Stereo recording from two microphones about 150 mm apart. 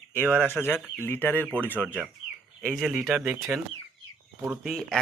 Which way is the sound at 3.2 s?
15° right (ahead or behind).